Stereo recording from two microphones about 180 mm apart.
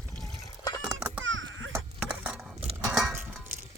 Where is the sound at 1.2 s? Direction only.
90° right.